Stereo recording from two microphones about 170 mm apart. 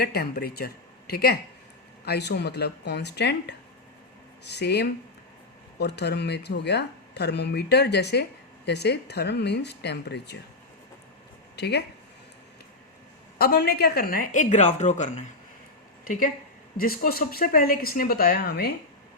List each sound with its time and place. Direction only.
0.0 s speech: 65° left (ahead or behind)
11.5 s speech: 80° left
13.4 s speech: 70° left (ahead or behind); by 15.3 s 45° left (ahead or behind)
16.7 s a woman's voice: 60° left (ahead or behind)